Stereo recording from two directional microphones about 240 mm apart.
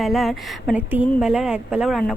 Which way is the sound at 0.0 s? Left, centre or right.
Centre.